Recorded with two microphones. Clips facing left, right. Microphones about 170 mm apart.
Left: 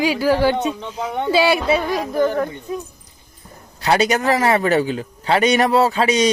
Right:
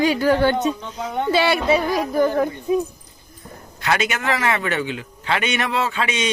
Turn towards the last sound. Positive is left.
turn(degrees=40)  # may be behind; listen again after turning